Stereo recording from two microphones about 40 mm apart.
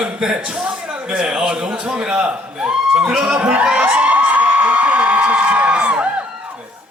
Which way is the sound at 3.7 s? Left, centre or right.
Right.